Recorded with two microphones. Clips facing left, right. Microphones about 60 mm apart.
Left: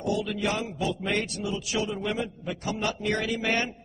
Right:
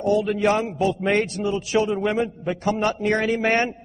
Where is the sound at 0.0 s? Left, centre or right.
Right.